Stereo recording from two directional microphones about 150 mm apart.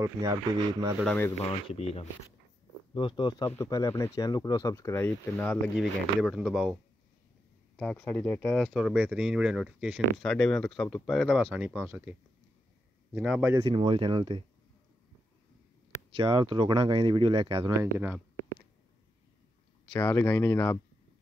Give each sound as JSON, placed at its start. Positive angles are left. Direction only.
{"t": 0.0, "sound": "speech", "side_deg": -25}
{"t": 1.0, "sound": "speech", "side_deg": 10}
{"t": 1.4, "sound": "speech", "side_deg": 40}
{"t": 3.4, "sound": "speech", "side_deg": 15}
{"t": 5.8, "sound": "speech", "side_deg": 0}
{"t": 7.7, "sound": "speech", "side_deg": 10}
{"t": 13.7, "sound": "speech", "side_deg": -35}
{"t": 16.2, "sound": "speech", "side_deg": -35}
{"t": 17.9, "sound": "speech", "side_deg": -15}
{"t": 20.0, "sound": "speech", "side_deg": 25}